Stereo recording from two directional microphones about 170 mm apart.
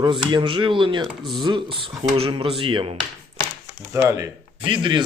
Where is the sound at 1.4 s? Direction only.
30° right (ahead or behind).